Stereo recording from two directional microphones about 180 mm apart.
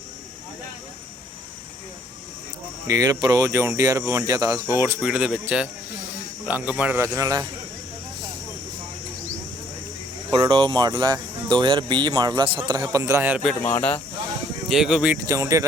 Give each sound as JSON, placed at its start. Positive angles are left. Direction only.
{"t": 2.8, "sound": "speech", "side_deg": -20}
{"t": 10.3, "sound": "speech", "side_deg": -25}
{"t": 14.7, "sound": "speech", "side_deg": 0}
{"t": 15.3, "sound": "speech", "side_deg": -15}